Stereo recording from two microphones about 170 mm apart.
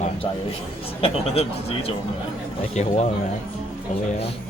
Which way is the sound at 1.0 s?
35° left (ahead or behind).